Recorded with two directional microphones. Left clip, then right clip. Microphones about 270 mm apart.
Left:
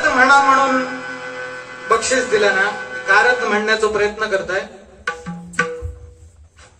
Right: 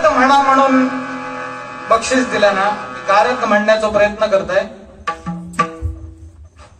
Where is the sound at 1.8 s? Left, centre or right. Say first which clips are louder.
Right 2 dB; left.